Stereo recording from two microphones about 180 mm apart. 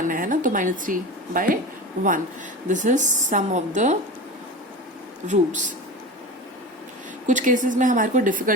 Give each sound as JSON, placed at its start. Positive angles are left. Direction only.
{"t": 0.1, "sound": "speech", "side_deg": -45}
{"t": 2.6, "sound": "speech", "side_deg": -45}
{"t": 5.3, "sound": "speech", "side_deg": -45}
{"t": 7.3, "sound": "speech", "side_deg": -45}